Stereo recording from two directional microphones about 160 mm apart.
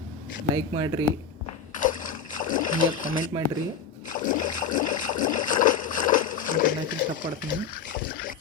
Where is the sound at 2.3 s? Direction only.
55° left (ahead or behind).